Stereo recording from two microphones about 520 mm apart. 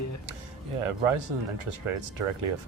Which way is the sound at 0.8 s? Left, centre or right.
Right.